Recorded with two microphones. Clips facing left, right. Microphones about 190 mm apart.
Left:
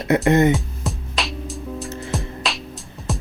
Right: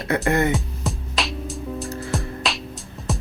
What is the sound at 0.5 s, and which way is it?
Music, centre (ahead or behind).